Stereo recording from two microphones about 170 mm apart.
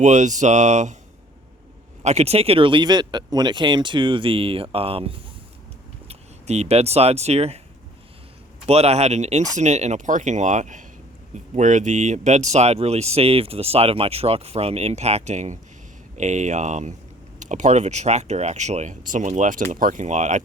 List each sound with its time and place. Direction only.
0.0 s speech: 45° right (ahead or behind)
2.0 s speech: 40° right (ahead or behind)
8.6 s speech: 40° right (ahead or behind)